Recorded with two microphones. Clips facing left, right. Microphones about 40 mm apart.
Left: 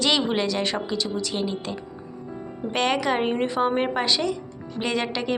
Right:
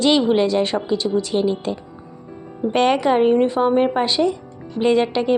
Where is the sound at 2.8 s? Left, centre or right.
Right.